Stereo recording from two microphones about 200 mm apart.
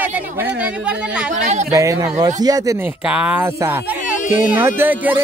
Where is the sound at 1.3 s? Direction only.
35° right (ahead or behind).